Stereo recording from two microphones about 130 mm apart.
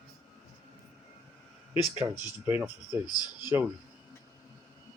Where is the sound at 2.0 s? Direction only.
15° right (ahead or behind).